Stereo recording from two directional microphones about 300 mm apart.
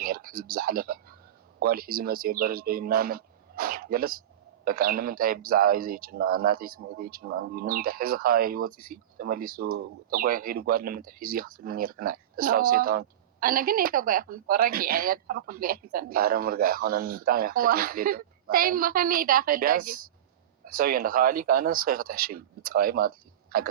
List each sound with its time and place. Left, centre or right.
0.0 s a sound: right
0.5 s speech: right
19.7 s speech: right
20.7 s speech: right